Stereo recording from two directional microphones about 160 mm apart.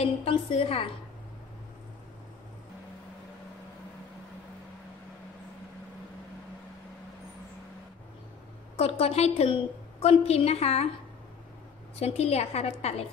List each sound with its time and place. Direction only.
0.0 s a woman's voice: 40° left (ahead or behind)
8.7 s a woman's voice: 40° left (ahead or behind)
12.0 s a woman's voice: 40° left (ahead or behind)